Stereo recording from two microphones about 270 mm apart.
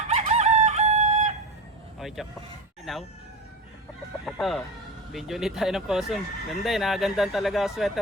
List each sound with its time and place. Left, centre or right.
0.1 s crowing: right
2.0 s vehicle: centre
2.9 s speech: centre
4.3 s speech: centre